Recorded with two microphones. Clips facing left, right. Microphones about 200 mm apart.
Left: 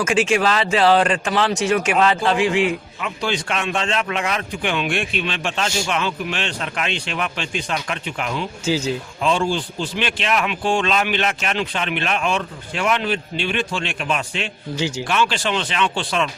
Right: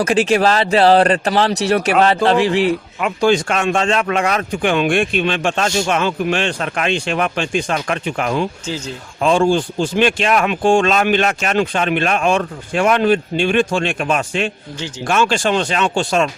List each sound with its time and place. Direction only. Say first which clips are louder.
0.0 s speech: right 4 dB; 35° right (ahead or behind)
3.2 s speech: right 9 dB; 45° right (ahead or behind)